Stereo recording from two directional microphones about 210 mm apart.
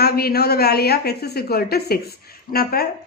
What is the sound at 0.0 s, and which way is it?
A woman's voice, 50° left (ahead or behind).